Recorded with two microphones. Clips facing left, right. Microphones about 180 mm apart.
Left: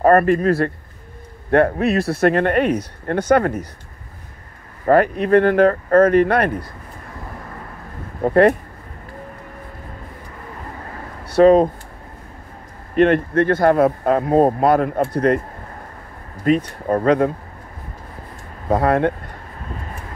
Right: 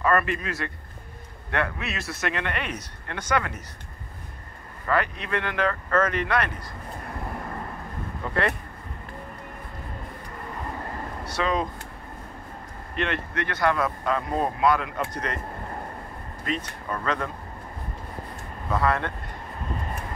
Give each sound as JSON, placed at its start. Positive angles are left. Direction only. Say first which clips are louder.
{"t": 0.0, "sound": "speech", "louder": "left 11 dB", "side_deg": 45}
{"t": 4.8, "sound": "speech", "louder": "left 11 dB", "side_deg": 50}
{"t": 8.2, "sound": "speech", "louder": "left 14 dB", "side_deg": 50}
{"t": 11.2, "sound": "speech", "louder": "left 15 dB", "side_deg": 55}
{"t": 12.9, "sound": "speech", "louder": "left 14 dB", "side_deg": 45}
{"t": 16.8, "sound": "speech", "louder": "left 14 dB", "side_deg": 50}
{"t": 18.7, "sound": "speech", "louder": "left 9 dB", "side_deg": 50}